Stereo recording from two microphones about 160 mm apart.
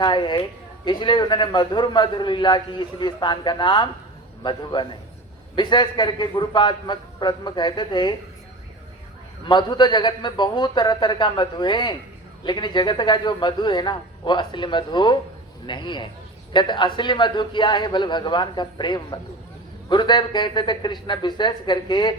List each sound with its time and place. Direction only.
0.0 s a man's voice: 30° left (ahead or behind)
9.5 s a man's voice: 30° left (ahead or behind)